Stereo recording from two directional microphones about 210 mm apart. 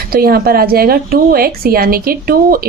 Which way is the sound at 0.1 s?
45° right (ahead or behind).